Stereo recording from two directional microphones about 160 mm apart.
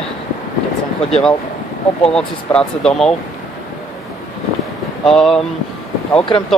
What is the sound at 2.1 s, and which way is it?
Speech, 5° left (ahead or behind).